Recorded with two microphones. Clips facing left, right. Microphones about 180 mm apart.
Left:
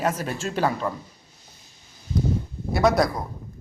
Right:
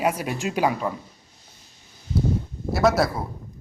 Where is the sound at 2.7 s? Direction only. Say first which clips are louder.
Even; centre (ahead or behind).